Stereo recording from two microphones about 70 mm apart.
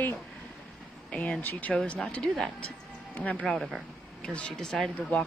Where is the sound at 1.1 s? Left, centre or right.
Centre.